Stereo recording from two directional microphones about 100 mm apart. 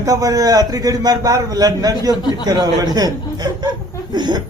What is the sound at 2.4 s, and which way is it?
A man's voice, 40° right (ahead or behind).